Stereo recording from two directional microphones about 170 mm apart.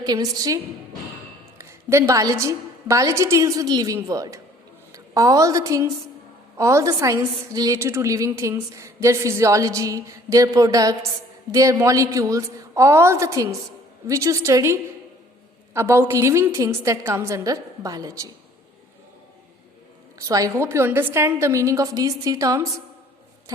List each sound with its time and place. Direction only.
0.0 s a woman's voice: 20° right (ahead or behind)
20.1 s a woman's voice: 20° right (ahead or behind)